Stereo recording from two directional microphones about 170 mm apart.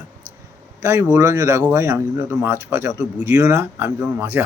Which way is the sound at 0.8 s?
15° right (ahead or behind).